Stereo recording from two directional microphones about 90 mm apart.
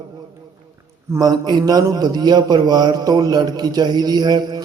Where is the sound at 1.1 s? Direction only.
45° right (ahead or behind).